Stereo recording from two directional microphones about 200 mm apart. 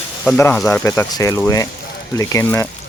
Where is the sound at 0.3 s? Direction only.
10° left (ahead or behind).